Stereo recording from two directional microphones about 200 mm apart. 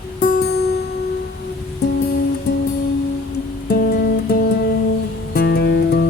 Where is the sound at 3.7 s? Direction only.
50° left (ahead or behind).